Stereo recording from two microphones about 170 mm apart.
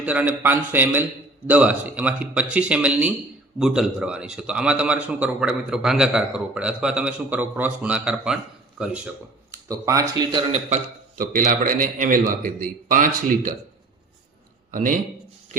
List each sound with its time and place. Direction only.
0.0 s a man's voice: 10° right (ahead or behind)
9.6 s speech: 20° right (ahead or behind)
11.2 s a man's voice: 50° right (ahead or behind)
14.7 s a man's voice: 50° right (ahead or behind)